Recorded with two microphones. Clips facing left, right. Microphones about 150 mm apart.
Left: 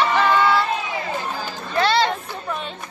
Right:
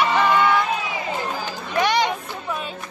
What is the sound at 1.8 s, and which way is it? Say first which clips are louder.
Chatter: left 1 dB; 15° right (ahead or behind).